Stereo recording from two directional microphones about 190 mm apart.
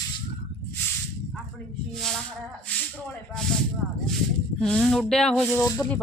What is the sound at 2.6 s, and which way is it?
Speech, 5° left (ahead or behind).